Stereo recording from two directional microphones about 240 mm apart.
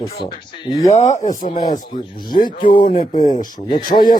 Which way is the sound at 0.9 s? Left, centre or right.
Left.